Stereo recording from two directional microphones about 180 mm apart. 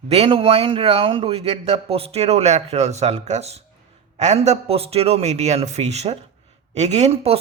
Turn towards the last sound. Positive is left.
turn(degrees=-35)  # may be behind; listen again after turning